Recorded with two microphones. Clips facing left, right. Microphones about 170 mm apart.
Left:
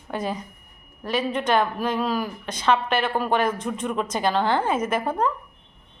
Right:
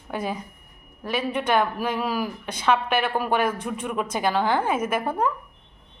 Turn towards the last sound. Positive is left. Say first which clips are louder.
# left 1 dB
turn(degrees=-10)  # may be behind; listen again after turning